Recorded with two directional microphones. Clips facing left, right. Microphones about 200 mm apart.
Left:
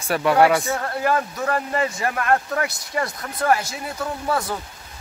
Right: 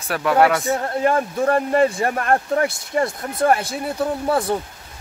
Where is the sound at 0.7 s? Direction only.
25° right (ahead or behind).